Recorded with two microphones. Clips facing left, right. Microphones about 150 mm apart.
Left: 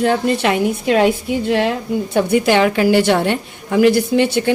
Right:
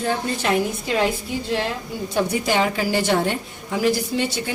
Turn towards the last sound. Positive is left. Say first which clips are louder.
# left 8 dB
turn(degrees=65)  # may be behind; listen again after turning